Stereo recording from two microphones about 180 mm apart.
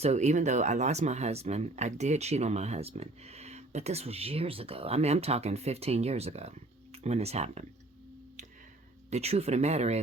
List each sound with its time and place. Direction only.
0.0 s speech: 40° right (ahead or behind)
9.0 s speech: 35° right (ahead or behind)